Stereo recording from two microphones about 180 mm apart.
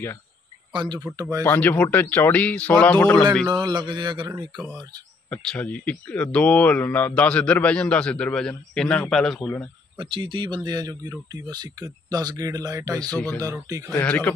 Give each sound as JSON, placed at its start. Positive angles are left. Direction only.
{"t": 0.7, "sound": "speech", "side_deg": -25}
{"t": 1.4, "sound": "speech", "side_deg": 10}
{"t": 3.4, "sound": "speech", "side_deg": -25}
{"t": 5.3, "sound": "speech", "side_deg": 5}
{"t": 9.9, "sound": "speech", "side_deg": -30}
{"t": 13.1, "sound": "speech", "side_deg": 10}
{"t": 13.4, "sound": "speech", "side_deg": -20}
{"t": 13.9, "sound": "speech", "side_deg": 10}